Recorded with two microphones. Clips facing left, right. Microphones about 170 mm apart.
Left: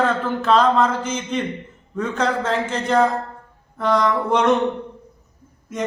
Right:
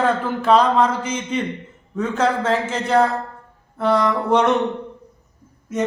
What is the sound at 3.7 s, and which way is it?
Mantra, 5° right (ahead or behind).